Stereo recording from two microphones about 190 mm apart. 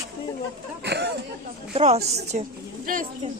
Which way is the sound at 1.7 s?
30° right (ahead or behind).